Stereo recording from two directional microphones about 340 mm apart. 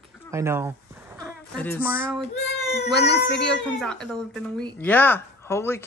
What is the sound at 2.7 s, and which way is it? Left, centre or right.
Speech, left.